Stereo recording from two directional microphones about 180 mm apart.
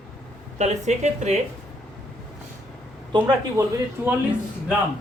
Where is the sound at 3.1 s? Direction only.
25° right (ahead or behind).